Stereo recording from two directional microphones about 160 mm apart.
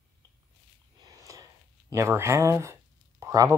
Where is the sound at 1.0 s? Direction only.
20° right (ahead or behind).